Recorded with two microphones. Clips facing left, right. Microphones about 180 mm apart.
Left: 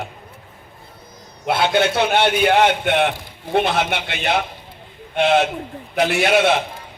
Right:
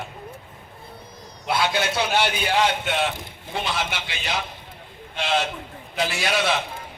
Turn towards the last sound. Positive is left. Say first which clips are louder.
# left 8 dB
turn(degrees=60)  # may be behind; listen again after turning